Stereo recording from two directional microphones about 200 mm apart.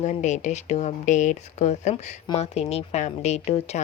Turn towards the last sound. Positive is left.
turn(degrees=35)  # may be behind; listen again after turning